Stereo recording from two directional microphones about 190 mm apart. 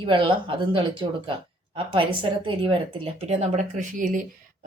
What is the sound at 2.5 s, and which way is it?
Speech, 25° right (ahead or behind).